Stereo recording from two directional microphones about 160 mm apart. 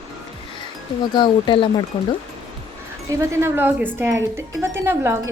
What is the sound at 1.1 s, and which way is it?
Speech, 30° left (ahead or behind).